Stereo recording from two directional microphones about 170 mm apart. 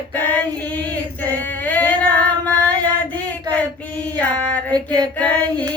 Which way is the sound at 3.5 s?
10° left (ahead or behind).